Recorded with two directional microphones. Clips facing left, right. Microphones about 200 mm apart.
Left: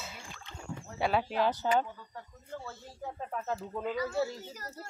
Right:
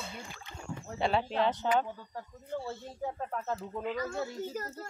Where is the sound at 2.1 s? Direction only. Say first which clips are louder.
Right 6 dB; 30° right (ahead or behind).